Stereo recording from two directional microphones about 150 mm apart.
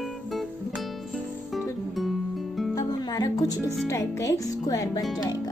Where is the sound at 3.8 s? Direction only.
20° left (ahead or behind).